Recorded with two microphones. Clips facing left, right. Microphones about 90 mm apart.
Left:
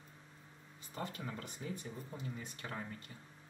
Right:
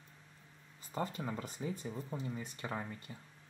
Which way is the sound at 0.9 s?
25° right (ahead or behind).